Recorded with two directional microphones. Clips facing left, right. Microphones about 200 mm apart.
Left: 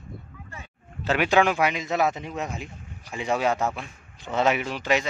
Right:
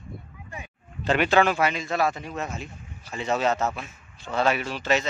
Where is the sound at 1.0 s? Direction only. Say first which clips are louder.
Even; 10° left (ahead or behind).